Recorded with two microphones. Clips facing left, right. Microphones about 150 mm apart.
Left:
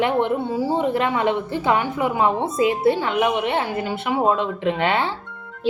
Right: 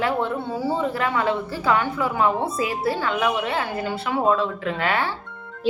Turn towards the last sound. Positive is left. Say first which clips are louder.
# left 3 dB
turn(degrees=25)  # may be behind; listen again after turning